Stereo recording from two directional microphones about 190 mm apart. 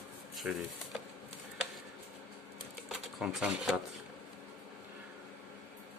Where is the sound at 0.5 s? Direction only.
5° right (ahead or behind).